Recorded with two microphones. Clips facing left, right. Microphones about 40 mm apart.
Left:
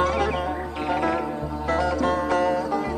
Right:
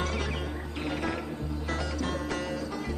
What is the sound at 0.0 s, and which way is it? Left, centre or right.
Music, centre.